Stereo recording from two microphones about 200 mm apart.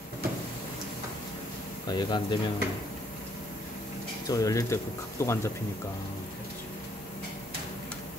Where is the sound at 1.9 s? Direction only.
20° left (ahead or behind).